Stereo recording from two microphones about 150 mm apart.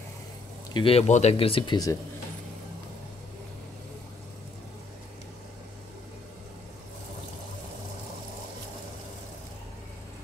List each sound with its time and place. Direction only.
0.7 s speech: 40° left (ahead or behind)